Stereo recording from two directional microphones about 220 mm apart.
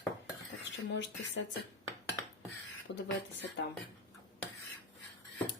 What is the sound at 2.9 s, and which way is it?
Speech, 55° left (ahead or behind).